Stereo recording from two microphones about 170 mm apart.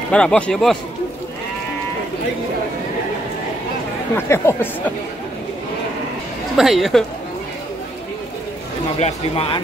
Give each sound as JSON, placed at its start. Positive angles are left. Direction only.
{"t": 0.1, "sound": "speech", "side_deg": 5}
{"t": 4.3, "sound": "speech", "side_deg": 15}
{"t": 6.5, "sound": "speech", "side_deg": 0}
{"t": 9.0, "sound": "speech", "side_deg": 35}